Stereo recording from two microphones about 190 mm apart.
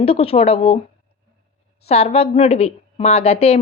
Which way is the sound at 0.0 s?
30° left (ahead or behind).